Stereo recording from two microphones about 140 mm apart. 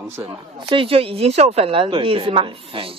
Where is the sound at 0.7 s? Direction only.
40° right (ahead or behind).